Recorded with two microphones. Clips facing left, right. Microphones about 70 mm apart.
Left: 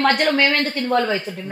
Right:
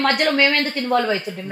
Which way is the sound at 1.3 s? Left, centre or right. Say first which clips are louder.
Right 1 dB; right.